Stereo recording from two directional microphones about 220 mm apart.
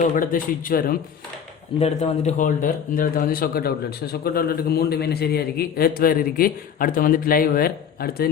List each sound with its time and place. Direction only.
0.0 s a man's voice: 40° left (ahead or behind)
1.8 s speech: 30° left (ahead or behind)